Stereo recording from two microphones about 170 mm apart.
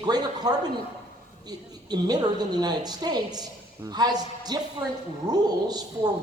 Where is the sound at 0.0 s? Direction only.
25° right (ahead or behind).